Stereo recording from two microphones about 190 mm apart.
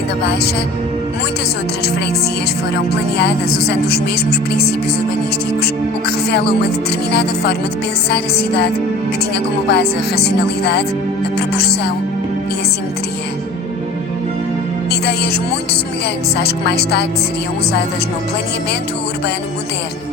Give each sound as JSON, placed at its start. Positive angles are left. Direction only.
{"t": 3.2, "sound": "a woman's voice", "side_deg": 60}
{"t": 6.3, "sound": "a woman's voice", "side_deg": 60}
{"t": 14.8, "sound": "music", "side_deg": 60}
{"t": 16.6, "sound": "a woman's voice", "side_deg": 60}